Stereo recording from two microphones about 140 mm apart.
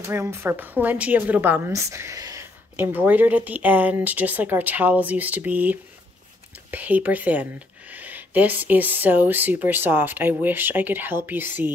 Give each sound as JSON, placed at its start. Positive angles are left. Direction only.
{"t": 0.1, "sound": "speech", "side_deg": -20}
{"t": 1.7, "sound": "speech", "side_deg": -20}
{"t": 2.8, "sound": "speech", "side_deg": -15}